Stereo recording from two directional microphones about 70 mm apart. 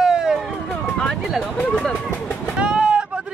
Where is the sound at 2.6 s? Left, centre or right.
Centre.